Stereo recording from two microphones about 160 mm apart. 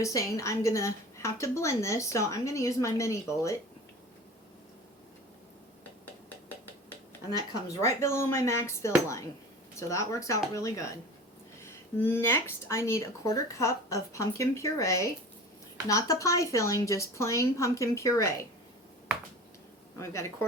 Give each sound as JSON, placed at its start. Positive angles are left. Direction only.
{"t": 0.0, "sound": "a woman's voice", "side_deg": 20}
{"t": 7.3, "sound": "a woman's voice", "side_deg": 20}
{"t": 12.1, "sound": "a woman's voice", "side_deg": 15}
{"t": 20.0, "sound": "speech", "side_deg": 15}